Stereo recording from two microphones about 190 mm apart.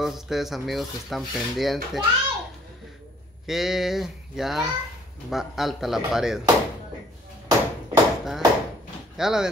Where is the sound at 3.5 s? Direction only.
Centre (ahead or behind).